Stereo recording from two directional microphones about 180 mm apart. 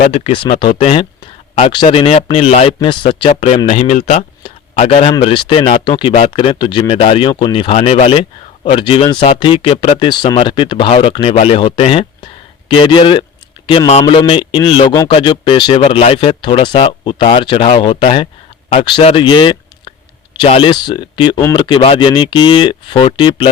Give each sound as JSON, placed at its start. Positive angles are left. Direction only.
{"t": 0.1, "sound": "speech", "side_deg": 30}